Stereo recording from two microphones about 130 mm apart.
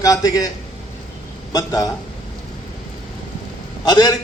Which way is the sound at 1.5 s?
30° left (ahead or behind).